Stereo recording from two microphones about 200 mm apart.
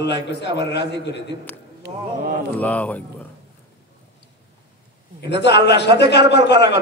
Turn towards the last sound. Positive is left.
turn(degrees=60)  # may be behind; listen again after turning